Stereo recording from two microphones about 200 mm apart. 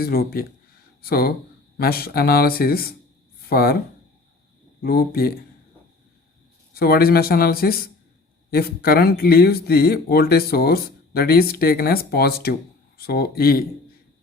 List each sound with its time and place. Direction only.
0.0 s speech: 50° left (ahead or behind)
6.7 s speech: 50° left (ahead or behind)